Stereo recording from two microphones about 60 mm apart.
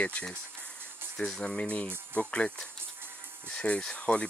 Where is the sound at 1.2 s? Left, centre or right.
Centre.